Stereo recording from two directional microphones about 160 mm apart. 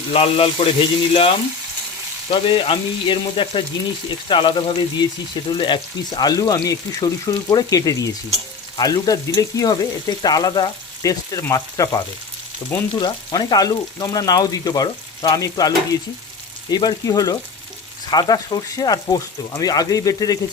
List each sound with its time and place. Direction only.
0.1 s frying: 35° left (ahead or behind)
2.3 s frying: 30° left (ahead or behind)
4.3 s speech: 30° left (ahead or behind)